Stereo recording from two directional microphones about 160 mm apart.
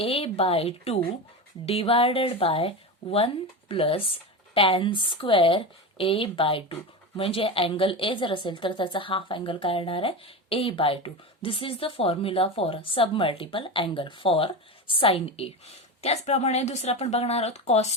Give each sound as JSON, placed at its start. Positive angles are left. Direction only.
{"t": 0.0, "sound": "a woman's voice", "side_deg": 35}